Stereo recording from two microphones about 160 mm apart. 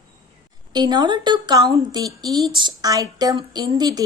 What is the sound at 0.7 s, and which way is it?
Speech, 25° right (ahead or behind).